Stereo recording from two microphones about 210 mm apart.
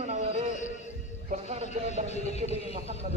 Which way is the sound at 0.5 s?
35° left (ahead or behind).